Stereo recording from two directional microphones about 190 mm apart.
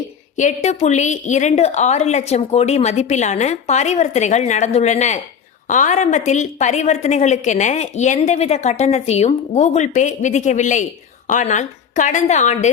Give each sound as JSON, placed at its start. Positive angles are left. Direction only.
{"t": 0.3, "sound": "a woman's voice", "side_deg": 40}